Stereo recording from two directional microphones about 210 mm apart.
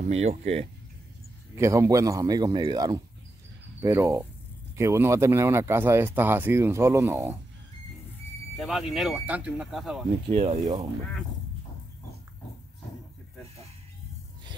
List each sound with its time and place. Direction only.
0.0 s speech: 30° right (ahead or behind)
1.6 s speech: 15° right (ahead or behind)
8.5 s speech: centre (ahead or behind)
10.3 s speech: 35° right (ahead or behind)